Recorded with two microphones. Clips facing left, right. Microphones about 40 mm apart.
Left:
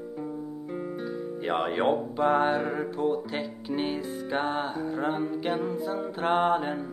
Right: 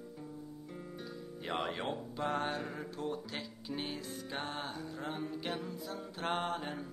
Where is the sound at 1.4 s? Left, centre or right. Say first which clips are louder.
Left 9 dB; left.